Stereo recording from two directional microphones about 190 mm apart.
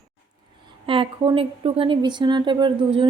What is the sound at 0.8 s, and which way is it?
Speech, 25° right (ahead or behind).